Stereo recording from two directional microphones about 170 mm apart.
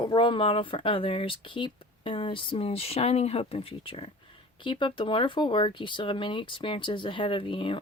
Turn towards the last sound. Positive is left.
turn(degrees=30)  # may be behind; listen again after turning